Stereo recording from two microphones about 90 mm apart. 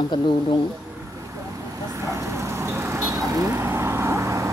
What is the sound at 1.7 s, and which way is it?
Vehicle, 35° right (ahead or behind).